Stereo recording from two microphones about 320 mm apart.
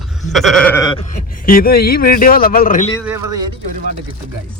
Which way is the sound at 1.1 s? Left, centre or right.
Left.